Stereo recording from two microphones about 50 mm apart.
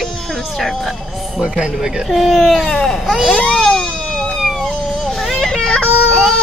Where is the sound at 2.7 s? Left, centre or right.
Centre.